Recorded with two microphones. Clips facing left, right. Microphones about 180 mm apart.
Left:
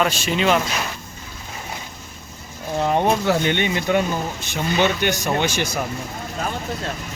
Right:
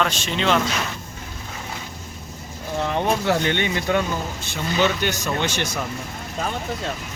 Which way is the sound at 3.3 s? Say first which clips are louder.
Left 2 dB; 20° left (ahead or behind).